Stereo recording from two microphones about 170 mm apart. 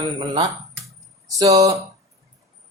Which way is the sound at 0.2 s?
25° right (ahead or behind).